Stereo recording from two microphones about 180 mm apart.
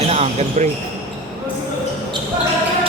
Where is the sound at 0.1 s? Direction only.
35° right (ahead or behind).